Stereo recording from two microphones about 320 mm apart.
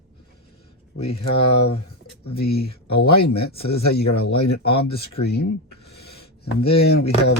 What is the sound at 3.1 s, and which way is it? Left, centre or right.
Speech, left.